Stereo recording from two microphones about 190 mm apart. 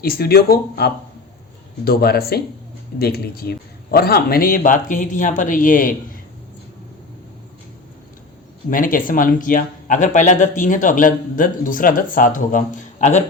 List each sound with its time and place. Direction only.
0.0 s speech: 55° left (ahead or behind)
8.7 s speech: 45° left (ahead or behind)